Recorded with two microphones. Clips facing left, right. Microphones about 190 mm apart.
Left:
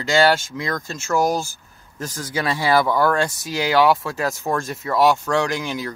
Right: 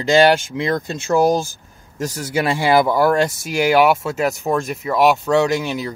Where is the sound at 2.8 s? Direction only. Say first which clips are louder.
Right 3 dB; 10° right (ahead or behind).